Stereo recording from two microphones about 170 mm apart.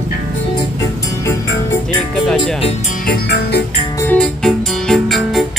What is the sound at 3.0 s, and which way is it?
Music, 65° left (ahead or behind).